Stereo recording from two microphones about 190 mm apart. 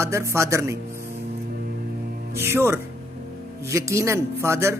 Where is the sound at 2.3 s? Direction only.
15° right (ahead or behind).